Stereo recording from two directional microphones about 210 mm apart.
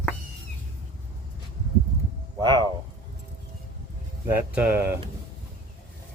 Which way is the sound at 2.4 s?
20° right (ahead or behind).